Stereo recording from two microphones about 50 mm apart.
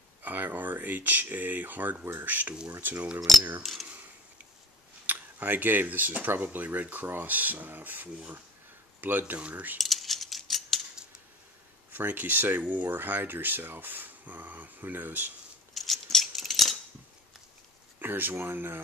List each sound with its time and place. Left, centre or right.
0.2 s speech: right
3.2 s speech: centre
5.0 s speech: right
9.8 s a sound: centre
11.9 s speech: right
15.7 s a sound: centre
18.0 s speech: right